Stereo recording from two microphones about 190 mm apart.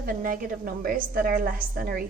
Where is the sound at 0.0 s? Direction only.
45° right (ahead or behind).